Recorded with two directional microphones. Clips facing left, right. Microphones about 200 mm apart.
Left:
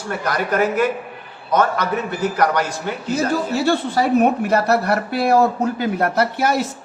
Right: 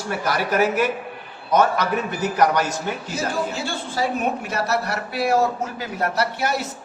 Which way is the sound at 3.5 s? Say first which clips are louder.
Left 9 dB; 60° left (ahead or behind).